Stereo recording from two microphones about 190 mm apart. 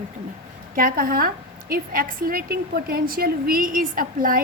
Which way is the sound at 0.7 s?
45° right (ahead or behind).